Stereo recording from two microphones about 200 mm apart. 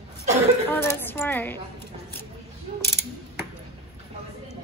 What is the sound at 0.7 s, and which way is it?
Speech, 10° left (ahead or behind).